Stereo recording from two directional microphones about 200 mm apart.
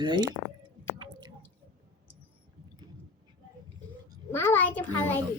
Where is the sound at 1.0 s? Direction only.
20° right (ahead or behind).